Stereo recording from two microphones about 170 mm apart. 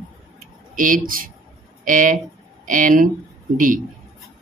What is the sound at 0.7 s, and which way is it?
Speech, 55° right (ahead or behind).